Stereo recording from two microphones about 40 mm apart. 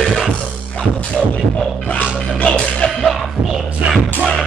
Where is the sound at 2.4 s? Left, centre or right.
Left.